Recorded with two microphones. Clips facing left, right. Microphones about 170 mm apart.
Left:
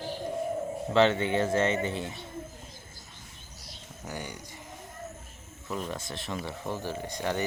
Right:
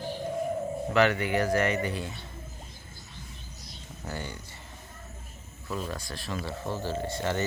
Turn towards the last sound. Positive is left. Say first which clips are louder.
# right 1 dB
turn(degrees=15)  # may be behind; listen again after turning